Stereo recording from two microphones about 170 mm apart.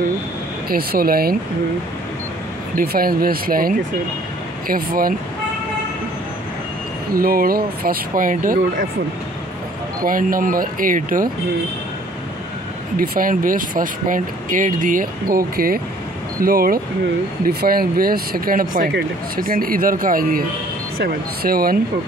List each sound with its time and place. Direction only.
0.7 s speech: 60° right (ahead or behind)
2.7 s speech: 60° right (ahead or behind)
7.2 s speech: 60° right (ahead or behind)
10.0 s speech: 55° right (ahead or behind)
12.9 s speech: 60° right (ahead or behind)